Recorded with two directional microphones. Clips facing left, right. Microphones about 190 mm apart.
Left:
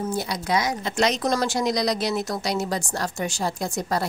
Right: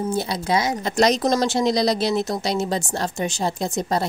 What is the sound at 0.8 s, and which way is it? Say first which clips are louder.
Speech: right 4 dB; 40° right (ahead or behind).